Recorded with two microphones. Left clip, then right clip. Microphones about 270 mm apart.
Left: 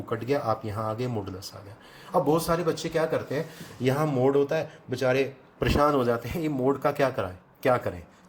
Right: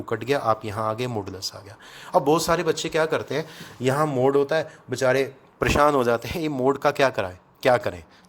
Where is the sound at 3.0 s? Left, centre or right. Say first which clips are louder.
Right 3 dB; right.